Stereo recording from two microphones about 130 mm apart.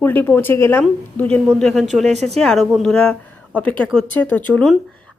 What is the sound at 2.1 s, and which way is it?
Speech, 60° right (ahead or behind).